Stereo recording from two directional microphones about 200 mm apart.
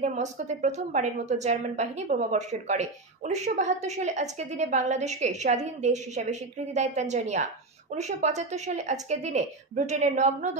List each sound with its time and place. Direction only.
0.0 s a woman's voice: 35° right (ahead or behind)